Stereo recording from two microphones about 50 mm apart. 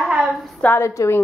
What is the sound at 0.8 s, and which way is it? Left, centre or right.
Speech, left.